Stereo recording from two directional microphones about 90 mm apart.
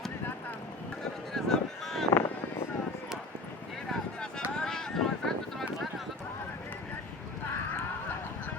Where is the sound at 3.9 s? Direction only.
10° left (ahead or behind).